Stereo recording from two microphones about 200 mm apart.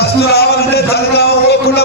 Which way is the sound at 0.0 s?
55° left (ahead or behind).